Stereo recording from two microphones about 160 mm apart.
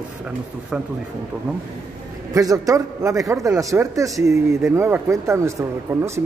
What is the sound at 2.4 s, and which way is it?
A man's voice, 20° right (ahead or behind).